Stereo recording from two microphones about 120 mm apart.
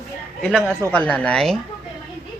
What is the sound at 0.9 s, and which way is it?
Speech, 10° left (ahead or behind).